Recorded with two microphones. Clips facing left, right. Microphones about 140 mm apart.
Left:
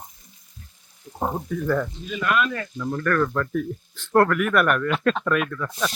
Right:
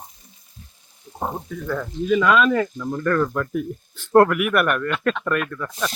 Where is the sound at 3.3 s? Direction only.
10° right (ahead or behind).